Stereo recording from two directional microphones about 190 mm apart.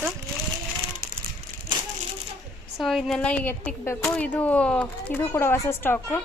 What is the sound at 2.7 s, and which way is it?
Speech, centre (ahead or behind).